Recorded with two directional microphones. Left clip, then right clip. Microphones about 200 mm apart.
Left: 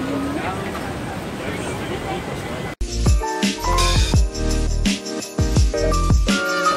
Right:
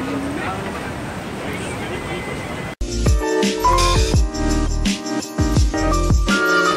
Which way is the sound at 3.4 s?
Centre (ahead or behind).